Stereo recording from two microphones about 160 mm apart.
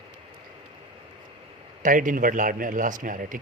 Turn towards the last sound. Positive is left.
turn(degrees=-55)  # may be behind; listen again after turning